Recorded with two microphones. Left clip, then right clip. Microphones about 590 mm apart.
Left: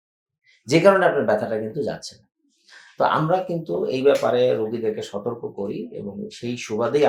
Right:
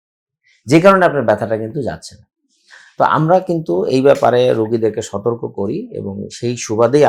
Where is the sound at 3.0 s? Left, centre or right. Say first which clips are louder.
Right 7 dB; right.